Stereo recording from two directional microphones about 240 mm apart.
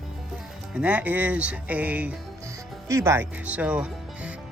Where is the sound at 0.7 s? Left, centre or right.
Centre.